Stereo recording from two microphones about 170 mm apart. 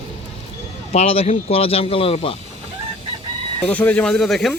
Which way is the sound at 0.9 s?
40° left (ahead or behind).